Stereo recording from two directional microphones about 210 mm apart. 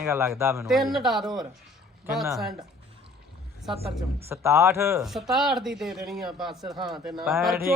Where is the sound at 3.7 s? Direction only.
30° right (ahead or behind).